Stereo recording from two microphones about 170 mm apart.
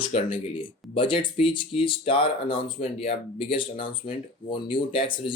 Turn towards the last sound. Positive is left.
turn(degrees=30)  # may be behind; listen again after turning